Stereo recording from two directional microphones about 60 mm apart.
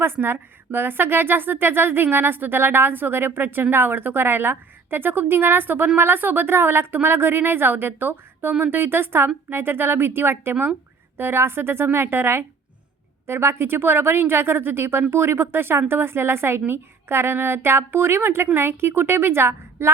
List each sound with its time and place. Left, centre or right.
0.0 s a woman's voice: right